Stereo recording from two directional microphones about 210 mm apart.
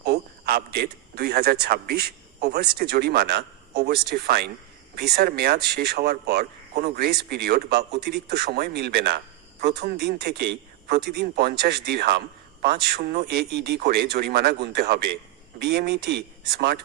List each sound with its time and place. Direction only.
0.0 s a man's voice: 50° right (ahead or behind)